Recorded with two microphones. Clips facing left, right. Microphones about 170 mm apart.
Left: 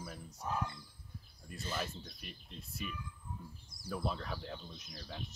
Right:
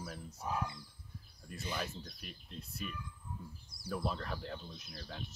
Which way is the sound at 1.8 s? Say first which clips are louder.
Even; centre (ahead or behind).